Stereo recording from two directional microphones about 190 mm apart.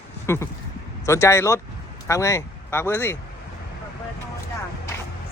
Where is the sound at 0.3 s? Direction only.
15° left (ahead or behind).